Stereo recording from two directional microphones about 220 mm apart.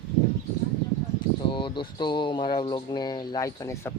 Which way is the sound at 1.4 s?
20° left (ahead or behind).